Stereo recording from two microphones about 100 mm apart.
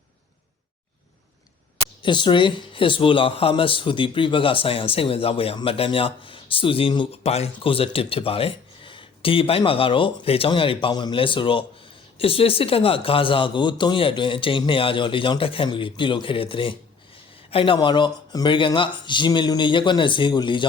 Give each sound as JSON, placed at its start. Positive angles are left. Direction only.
{"t": 2.0, "sound": "speech", "side_deg": 50}
{"t": 7.1, "sound": "speech", "side_deg": 90}
{"t": 10.9, "sound": "speech", "side_deg": 45}
{"t": 11.2, "sound": "speech", "side_deg": 60}
{"t": 17.7, "sound": "speech", "side_deg": 50}